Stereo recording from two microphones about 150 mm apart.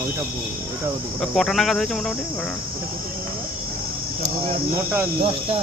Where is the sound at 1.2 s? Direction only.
Centre (ahead or behind).